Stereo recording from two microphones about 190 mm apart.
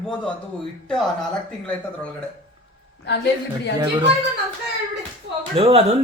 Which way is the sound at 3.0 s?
65° left (ahead or behind).